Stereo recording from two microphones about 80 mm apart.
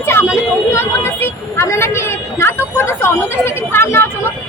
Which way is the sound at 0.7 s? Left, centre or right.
Left.